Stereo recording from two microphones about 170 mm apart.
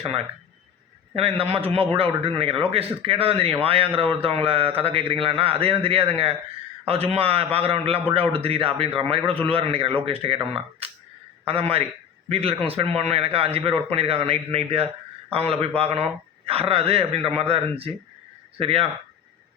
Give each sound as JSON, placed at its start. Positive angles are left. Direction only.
{"t": 0.0, "sound": "a man's voice", "side_deg": -35}